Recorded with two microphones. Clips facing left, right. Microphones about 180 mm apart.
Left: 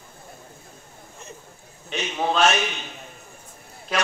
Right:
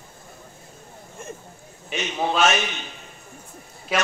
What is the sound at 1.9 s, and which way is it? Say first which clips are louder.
Speech: even; 5° right (ahead or behind).